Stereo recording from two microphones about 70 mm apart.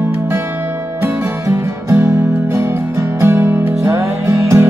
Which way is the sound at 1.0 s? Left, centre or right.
Right.